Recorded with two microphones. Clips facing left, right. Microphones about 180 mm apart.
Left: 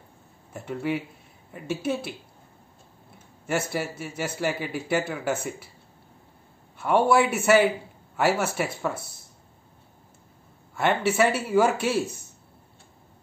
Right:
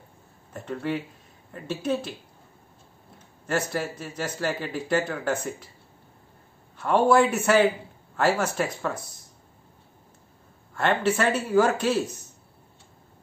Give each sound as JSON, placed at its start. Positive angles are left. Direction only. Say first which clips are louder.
{"t": 0.5, "sound": "a man's voice", "louder": "left 1 dB", "side_deg": 10}
{"t": 3.4, "sound": "a man's voice", "louder": "even", "side_deg": 10}
{"t": 6.8, "sound": "a man's voice", "louder": "right 1 dB", "side_deg": 10}
{"t": 10.7, "sound": "a man's voice", "louder": "even", "side_deg": 10}